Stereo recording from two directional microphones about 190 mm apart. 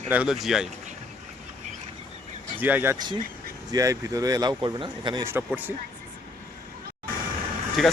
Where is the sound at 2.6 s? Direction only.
10° right (ahead or behind).